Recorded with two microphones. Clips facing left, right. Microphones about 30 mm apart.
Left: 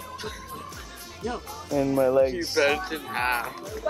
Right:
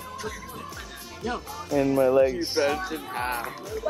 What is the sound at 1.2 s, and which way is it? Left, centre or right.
Speech, centre.